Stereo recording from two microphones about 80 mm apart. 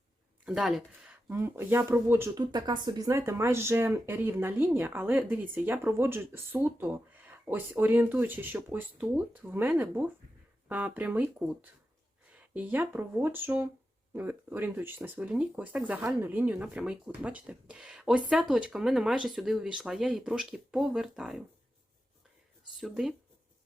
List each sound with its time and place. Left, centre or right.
0.4 s speech: centre
1.3 s speech: right
2.5 s speech: right
3.1 s speech: right; by 21.4 s centre
22.8 s speech: centre